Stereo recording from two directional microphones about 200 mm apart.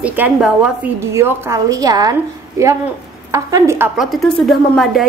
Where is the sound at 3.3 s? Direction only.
15° right (ahead or behind); by 5.0 s centre (ahead or behind).